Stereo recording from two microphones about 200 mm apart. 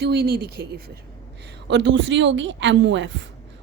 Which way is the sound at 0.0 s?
55° right (ahead or behind).